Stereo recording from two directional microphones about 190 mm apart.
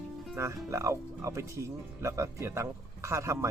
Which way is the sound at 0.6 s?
15° right (ahead or behind).